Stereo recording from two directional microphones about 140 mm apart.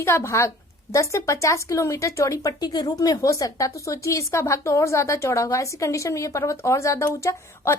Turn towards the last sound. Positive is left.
turn(degrees=20)  # may be behind; listen again after turning